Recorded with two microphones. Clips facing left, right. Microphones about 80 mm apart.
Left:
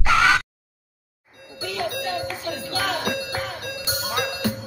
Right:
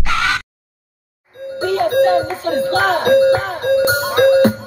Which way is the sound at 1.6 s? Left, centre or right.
Right.